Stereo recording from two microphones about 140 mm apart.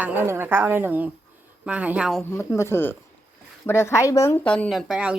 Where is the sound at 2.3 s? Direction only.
20° left (ahead or behind).